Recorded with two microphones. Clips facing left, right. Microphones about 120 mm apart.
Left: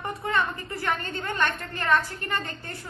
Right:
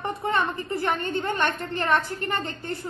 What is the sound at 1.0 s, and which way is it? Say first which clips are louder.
A woman's voice: right 3 dB; 25° right (ahead or behind).